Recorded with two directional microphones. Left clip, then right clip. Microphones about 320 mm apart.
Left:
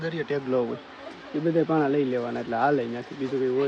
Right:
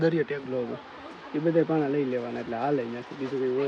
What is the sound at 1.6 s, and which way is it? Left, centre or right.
Speech, centre.